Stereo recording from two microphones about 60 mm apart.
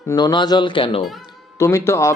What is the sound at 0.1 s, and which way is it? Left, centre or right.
Speech, left.